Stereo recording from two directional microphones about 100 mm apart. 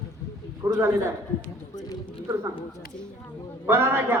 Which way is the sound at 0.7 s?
30° right (ahead or behind).